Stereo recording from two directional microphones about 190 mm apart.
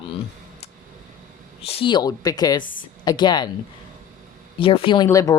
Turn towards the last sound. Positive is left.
turn(degrees=20)  # may be behind; listen again after turning